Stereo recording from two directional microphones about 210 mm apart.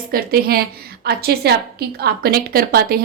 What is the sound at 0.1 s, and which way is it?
A woman's voice, 45° right (ahead or behind).